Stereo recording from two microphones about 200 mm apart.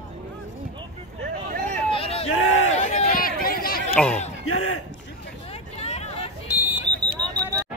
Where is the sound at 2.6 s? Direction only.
35° left (ahead or behind).